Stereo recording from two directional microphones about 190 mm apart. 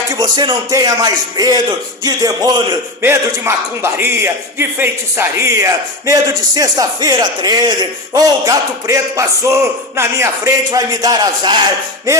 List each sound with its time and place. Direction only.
0.1 s speech: 20° right (ahead or behind)